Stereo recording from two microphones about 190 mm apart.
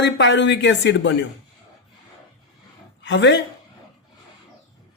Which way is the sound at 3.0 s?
70° left (ahead or behind).